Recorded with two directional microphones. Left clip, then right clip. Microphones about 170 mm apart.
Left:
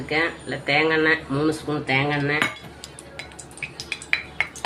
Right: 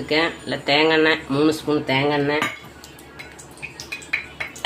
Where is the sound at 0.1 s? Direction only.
60° right (ahead or behind).